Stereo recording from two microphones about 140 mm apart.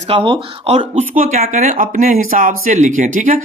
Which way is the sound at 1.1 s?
80° right.